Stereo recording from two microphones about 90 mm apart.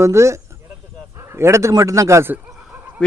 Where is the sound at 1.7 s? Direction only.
35° right (ahead or behind).